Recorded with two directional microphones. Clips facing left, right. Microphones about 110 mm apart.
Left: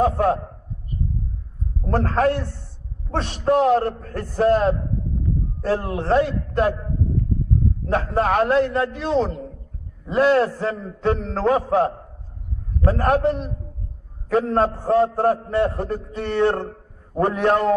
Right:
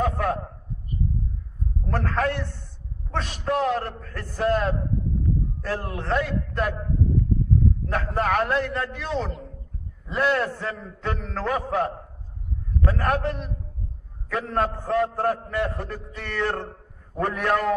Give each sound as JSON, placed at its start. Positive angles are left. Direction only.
{"t": 0.0, "sound": "a man's voice", "side_deg": 30}
{"t": 1.9, "sound": "a man's voice", "side_deg": 35}
{"t": 7.9, "sound": "a man's voice", "side_deg": 25}